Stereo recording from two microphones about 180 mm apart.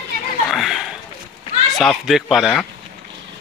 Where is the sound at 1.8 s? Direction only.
Centre (ahead or behind).